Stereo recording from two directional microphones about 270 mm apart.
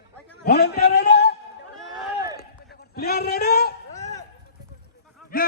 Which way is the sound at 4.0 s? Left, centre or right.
Centre.